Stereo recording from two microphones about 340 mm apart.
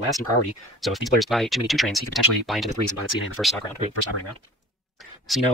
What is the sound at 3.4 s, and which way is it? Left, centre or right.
Speech, centre.